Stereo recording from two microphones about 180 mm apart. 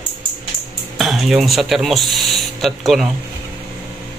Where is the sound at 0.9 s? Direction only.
Centre (ahead or behind).